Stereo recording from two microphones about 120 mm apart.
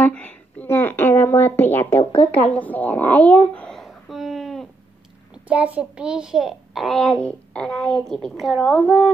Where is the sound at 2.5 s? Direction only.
15° left (ahead or behind).